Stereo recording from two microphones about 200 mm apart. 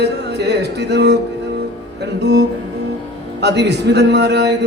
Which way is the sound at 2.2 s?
55° right (ahead or behind).